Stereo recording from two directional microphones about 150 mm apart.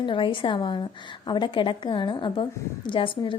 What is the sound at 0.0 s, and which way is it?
A woman's voice, 35° left (ahead or behind).